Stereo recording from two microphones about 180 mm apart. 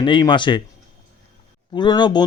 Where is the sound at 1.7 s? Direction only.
25° left (ahead or behind).